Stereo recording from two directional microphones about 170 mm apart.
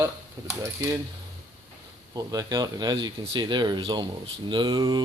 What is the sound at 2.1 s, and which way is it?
Speech, 20° right (ahead or behind).